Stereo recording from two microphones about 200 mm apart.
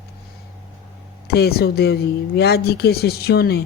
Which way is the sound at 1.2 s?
55° left (ahead or behind).